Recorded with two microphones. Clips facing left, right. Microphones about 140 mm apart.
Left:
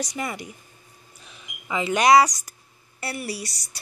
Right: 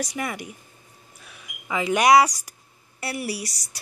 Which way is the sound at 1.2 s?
20° left (ahead or behind).